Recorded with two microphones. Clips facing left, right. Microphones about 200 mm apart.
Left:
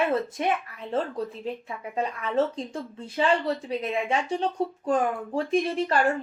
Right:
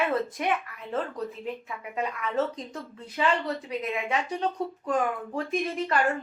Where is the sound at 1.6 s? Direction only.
30° left (ahead or behind).